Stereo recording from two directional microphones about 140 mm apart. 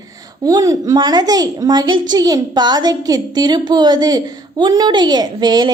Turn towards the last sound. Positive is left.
turn(degrees=-30)  # may be behind; listen again after turning